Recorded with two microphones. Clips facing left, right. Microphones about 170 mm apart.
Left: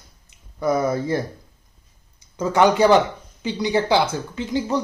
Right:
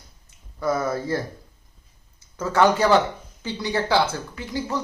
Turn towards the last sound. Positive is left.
turn(degrees=20)  # may be behind; listen again after turning